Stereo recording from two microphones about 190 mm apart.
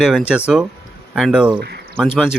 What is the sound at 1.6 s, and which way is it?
Speech, 60° right (ahead or behind).